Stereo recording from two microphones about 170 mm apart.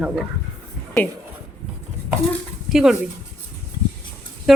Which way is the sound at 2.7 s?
5° right (ahead or behind).